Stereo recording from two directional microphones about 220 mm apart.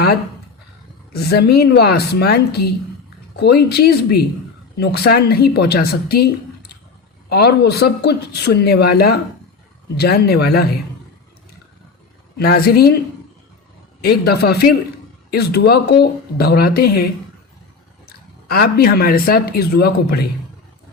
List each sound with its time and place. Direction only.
1.1 s speech: 45° left (ahead or behind)
12.4 s speech: 45° left (ahead or behind)
14.0 s speech: 45° left (ahead or behind)
18.4 s speech: 45° left (ahead or behind)